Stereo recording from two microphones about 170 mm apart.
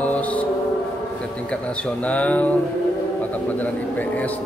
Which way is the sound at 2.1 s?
10° left (ahead or behind).